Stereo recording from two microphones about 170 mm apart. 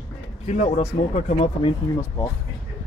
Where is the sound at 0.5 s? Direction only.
40° left (ahead or behind).